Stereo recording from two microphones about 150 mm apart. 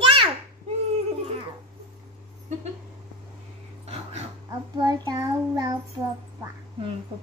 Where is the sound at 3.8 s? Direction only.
45° right (ahead or behind).